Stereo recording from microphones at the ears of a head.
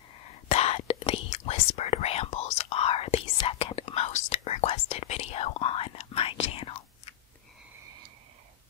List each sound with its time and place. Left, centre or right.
0.2 s whispering: left